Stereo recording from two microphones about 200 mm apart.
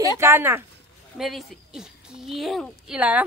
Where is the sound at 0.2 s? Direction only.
10° right (ahead or behind).